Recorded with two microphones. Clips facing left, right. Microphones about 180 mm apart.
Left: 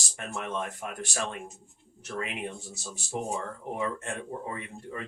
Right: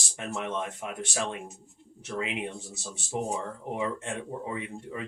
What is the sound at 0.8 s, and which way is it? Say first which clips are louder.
Speech: right 2 dB; centre (ahead or behind).